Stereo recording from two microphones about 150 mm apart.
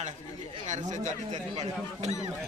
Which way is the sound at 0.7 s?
55° right (ahead or behind).